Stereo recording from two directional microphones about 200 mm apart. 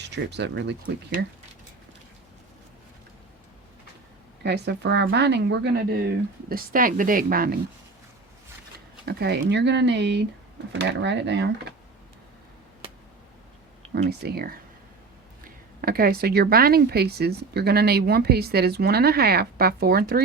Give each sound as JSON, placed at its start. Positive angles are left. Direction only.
{"t": 0.0, "sound": "speech", "side_deg": -60}
{"t": 4.4, "sound": "speech", "side_deg": -55}
{"t": 9.0, "sound": "speech", "side_deg": -55}
{"t": 14.1, "sound": "speech", "side_deg": -50}